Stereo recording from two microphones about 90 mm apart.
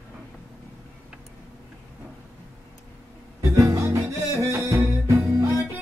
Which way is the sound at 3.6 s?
35° right (ahead or behind).